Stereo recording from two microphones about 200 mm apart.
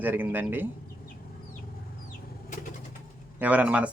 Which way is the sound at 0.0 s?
10° right (ahead or behind).